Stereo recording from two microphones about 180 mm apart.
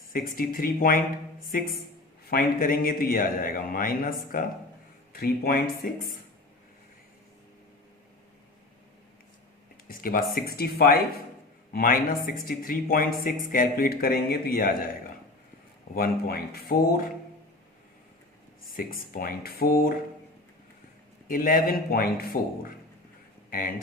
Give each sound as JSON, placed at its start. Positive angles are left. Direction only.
{"t": 0.1, "sound": "speech", "side_deg": 50}
{"t": 2.3, "sound": "a man's voice", "side_deg": 50}
{"t": 9.9, "sound": "a man's voice", "side_deg": 50}
{"t": 16.0, "sound": "a man's voice", "side_deg": 60}
{"t": 18.8, "sound": "a man's voice", "side_deg": 55}
{"t": 21.2, "sound": "a man's voice", "side_deg": 50}